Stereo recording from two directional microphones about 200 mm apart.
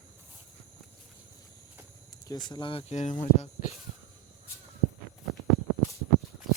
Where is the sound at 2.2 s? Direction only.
20° left (ahead or behind).